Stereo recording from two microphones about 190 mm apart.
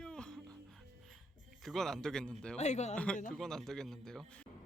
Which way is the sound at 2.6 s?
35° left (ahead or behind).